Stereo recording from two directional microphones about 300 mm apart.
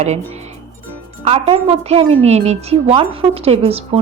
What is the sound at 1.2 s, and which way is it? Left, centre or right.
A woman's voice, centre.